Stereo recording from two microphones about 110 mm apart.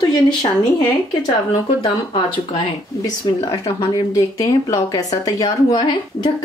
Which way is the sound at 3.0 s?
30° left (ahead or behind).